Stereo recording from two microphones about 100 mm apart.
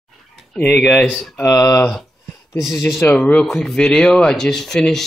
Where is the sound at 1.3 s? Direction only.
30° left (ahead or behind).